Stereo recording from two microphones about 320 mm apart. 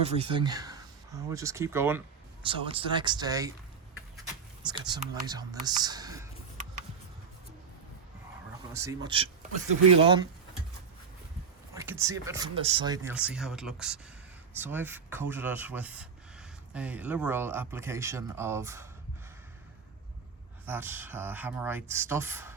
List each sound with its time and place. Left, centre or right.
0.0 s speech: centre
4.6 s speech: centre
8.7 s a man's voice: centre
11.7 s speech: centre
20.7 s speech: centre